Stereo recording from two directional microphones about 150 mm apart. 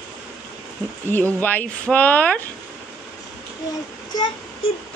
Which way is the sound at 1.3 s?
10° left (ahead or behind).